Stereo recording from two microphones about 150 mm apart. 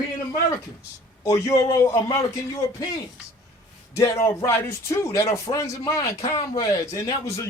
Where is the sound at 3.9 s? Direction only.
20° left (ahead or behind).